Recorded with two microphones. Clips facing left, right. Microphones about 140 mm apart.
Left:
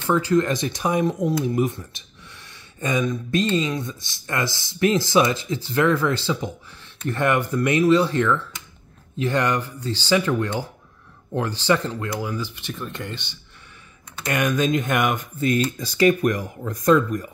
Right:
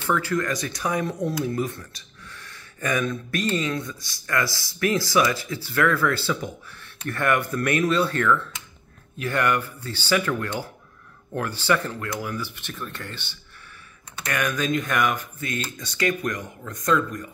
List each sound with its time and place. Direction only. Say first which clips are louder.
0.0 s speech: left 5 dB; 15° left (ahead or behind)
14.2 s speech: left 4 dB; 25° left (ahead or behind)